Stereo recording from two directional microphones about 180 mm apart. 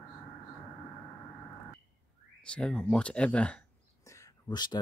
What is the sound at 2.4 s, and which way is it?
Speech, 5° left (ahead or behind).